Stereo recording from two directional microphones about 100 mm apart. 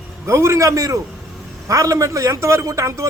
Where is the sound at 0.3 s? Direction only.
30° right (ahead or behind).